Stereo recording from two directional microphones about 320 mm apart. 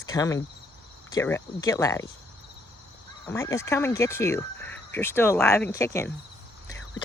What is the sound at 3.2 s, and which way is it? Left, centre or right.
Speech, centre.